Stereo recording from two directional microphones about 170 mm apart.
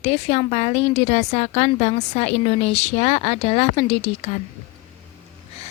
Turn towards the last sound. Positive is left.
turn(degrees=40)  # may be behind; listen again after turning